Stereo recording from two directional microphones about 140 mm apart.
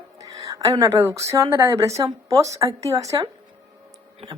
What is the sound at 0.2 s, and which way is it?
A woman's voice, 25° right (ahead or behind).